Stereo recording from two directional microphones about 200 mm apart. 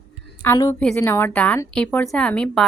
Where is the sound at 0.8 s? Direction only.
5° left (ahead or behind).